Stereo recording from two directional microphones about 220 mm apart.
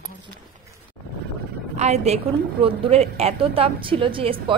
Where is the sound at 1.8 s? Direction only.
30° right (ahead or behind).